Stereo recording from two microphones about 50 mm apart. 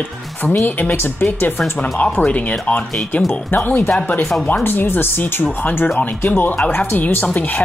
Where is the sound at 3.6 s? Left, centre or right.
Left.